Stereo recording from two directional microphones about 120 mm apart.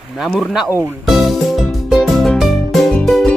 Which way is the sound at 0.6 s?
20° right (ahead or behind).